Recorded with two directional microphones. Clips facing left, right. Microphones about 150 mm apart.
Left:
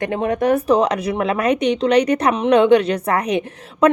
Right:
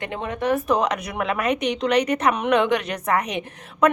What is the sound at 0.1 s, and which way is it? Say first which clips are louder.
Speech: left 5 dB; 45° left (ahead or behind).